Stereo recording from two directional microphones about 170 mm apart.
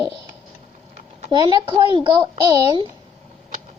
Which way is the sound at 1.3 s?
25° right (ahead or behind).